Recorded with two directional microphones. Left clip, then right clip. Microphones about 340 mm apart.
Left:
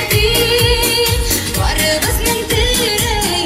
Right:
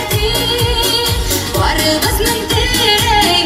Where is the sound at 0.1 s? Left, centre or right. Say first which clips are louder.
Left 3 dB; centre.